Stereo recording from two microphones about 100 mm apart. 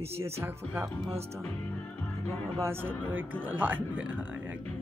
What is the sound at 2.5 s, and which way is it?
Speech, 25° right (ahead or behind).